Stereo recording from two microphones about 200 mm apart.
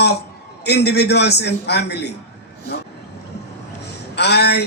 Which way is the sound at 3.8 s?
55° left (ahead or behind).